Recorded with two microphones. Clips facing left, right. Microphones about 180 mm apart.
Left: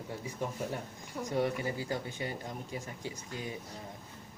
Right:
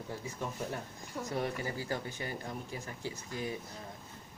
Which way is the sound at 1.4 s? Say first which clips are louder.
Left 3 dB; 15° left (ahead or behind).